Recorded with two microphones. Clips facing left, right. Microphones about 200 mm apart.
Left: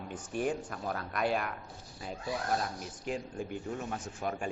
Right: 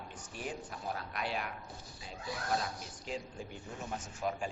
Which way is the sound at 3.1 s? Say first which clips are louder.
Left 5 dB; 50° left (ahead or behind).